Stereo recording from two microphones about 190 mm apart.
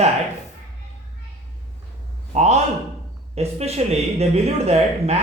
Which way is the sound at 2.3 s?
35° right (ahead or behind).